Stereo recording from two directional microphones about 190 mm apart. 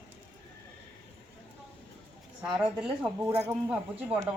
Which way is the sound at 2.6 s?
10° right (ahead or behind).